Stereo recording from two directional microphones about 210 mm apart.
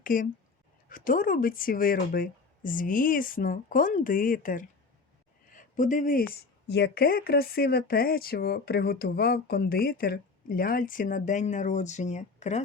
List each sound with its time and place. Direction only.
0.0 s speech: 40° left (ahead or behind)